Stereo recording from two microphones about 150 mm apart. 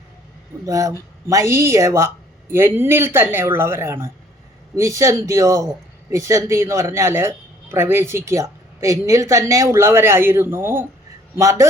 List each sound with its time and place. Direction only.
0.6 s a man's voice: 25° right (ahead or behind)